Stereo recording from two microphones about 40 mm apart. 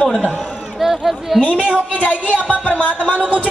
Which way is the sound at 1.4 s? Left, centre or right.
Right.